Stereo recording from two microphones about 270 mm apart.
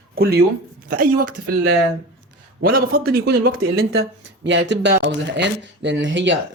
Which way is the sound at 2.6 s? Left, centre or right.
Right.